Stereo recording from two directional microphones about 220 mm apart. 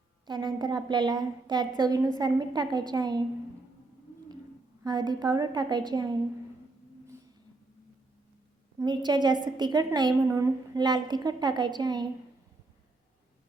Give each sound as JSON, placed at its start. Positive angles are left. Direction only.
{"t": 0.3, "sound": "a woman's voice", "side_deg": -20}
{"t": 4.8, "sound": "a woman's voice", "side_deg": -20}
{"t": 8.8, "sound": "a woman's voice", "side_deg": -20}